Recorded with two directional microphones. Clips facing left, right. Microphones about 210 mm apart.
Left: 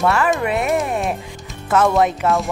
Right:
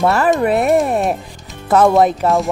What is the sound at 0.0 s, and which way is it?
Speech, 40° right (ahead or behind).